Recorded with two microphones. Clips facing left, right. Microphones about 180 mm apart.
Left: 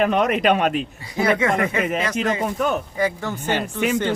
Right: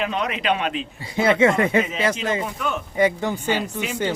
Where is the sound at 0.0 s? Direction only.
50° left (ahead or behind).